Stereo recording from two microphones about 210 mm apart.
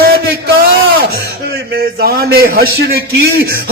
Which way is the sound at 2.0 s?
50° right (ahead or behind).